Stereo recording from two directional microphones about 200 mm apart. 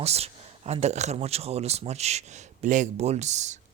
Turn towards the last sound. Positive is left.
turn(degrees=-35)  # may be behind; listen again after turning